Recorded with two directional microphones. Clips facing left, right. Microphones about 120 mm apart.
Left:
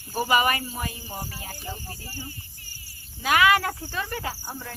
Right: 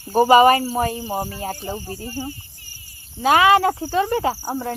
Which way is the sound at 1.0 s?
70° right (ahead or behind).